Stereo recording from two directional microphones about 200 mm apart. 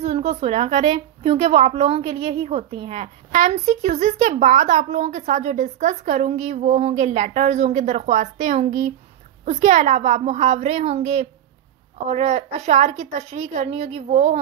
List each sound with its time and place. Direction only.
0.0 s a woman's voice: 30° right (ahead or behind)